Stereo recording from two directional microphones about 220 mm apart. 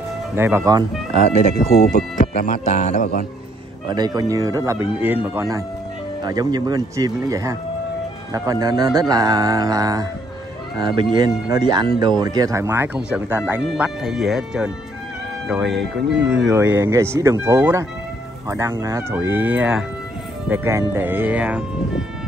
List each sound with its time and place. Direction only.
0.4 s speech: 10° right (ahead or behind)
1.6 s speech: 40° left (ahead or behind)
3.9 s speech: 20° right (ahead or behind); by 16.3 s centre (ahead or behind)
16.4 s speech: 10° right (ahead or behind)